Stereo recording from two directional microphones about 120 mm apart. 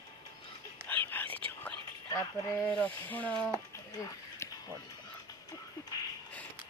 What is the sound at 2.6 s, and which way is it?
Speech, 10° left (ahead or behind).